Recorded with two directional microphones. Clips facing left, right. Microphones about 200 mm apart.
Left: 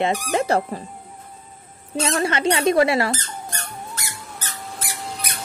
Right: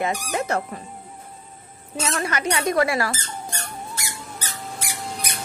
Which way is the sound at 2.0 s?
25° left (ahead or behind).